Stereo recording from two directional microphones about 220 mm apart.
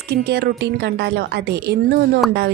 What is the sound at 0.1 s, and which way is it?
A woman's voice, 45° right (ahead or behind).